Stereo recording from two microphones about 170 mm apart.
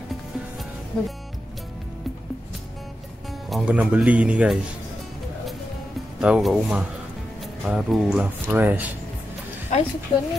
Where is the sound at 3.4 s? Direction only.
5° right (ahead or behind).